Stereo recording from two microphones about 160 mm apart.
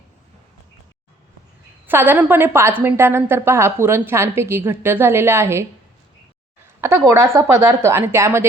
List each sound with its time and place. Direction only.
1.9 s a woman's voice: 10° right (ahead or behind)
6.8 s a woman's voice: 15° right (ahead or behind)